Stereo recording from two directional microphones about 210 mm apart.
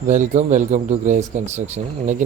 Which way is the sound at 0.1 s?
35° right (ahead or behind).